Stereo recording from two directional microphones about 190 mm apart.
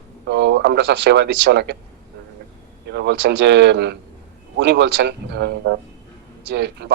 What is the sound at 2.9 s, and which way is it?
Speech, 65° right (ahead or behind).